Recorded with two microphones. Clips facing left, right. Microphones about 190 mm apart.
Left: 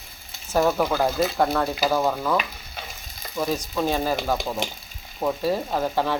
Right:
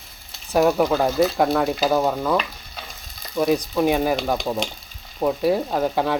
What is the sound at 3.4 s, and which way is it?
Frying, 20° right (ahead or behind).